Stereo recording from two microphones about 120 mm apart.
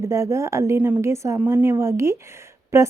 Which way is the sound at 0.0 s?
25° right (ahead or behind).